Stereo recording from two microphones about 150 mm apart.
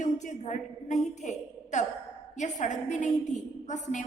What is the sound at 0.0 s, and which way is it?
A woman's voice, 55° left (ahead or behind).